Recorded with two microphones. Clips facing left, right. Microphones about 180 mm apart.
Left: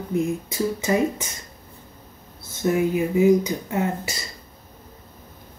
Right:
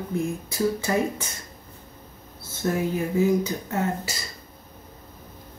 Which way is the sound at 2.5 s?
15° left (ahead or behind).